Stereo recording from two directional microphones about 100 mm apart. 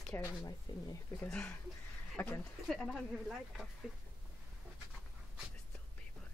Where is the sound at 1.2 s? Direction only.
10° left (ahead or behind).